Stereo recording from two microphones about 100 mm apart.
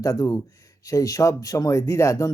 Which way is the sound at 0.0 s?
35° left (ahead or behind).